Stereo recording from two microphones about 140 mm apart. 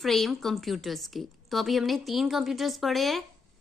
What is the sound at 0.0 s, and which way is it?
A woman's voice, centre (ahead or behind).